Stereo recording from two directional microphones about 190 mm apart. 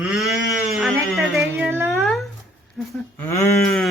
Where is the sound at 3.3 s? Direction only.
15° left (ahead or behind).